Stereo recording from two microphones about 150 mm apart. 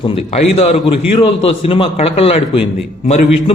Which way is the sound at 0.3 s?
45° left (ahead or behind).